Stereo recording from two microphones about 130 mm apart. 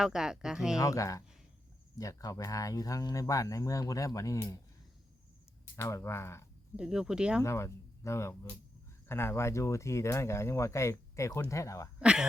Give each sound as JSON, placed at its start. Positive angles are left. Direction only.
{"t": 0.0, "sound": "speech", "side_deg": -5}
{"t": 0.8, "sound": "speech", "side_deg": 25}
{"t": 5.7, "sound": "speech", "side_deg": 20}
{"t": 6.7, "sound": "speech", "side_deg": -5}
{"t": 7.4, "sound": "speech", "side_deg": 20}
{"t": 11.9, "sound": "speech", "side_deg": -5}